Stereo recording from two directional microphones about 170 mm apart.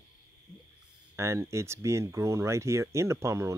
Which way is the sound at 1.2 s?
15° right (ahead or behind).